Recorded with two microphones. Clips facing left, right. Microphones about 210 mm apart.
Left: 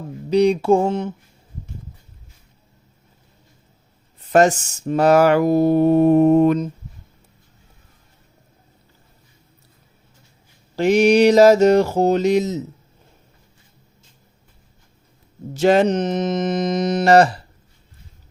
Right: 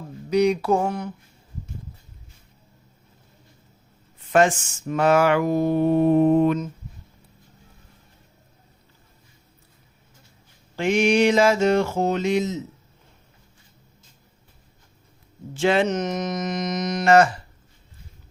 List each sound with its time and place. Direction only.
0.3 s a sound: 30° left (ahead or behind)
4.2 s speech: 40° left (ahead or behind)
10.8 s speech: 40° left (ahead or behind)
15.5 s speech: 40° left (ahead or behind)